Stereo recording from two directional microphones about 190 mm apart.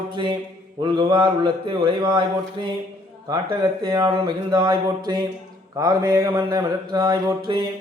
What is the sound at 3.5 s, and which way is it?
Speech, 20° right (ahead or behind).